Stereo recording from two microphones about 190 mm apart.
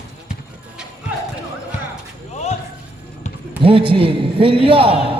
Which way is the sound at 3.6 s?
30° right (ahead or behind).